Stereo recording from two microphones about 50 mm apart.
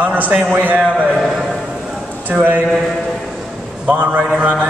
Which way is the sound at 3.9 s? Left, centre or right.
Right.